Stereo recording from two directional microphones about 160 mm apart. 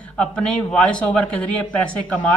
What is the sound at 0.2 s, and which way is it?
A woman's voice, 5° left (ahead or behind).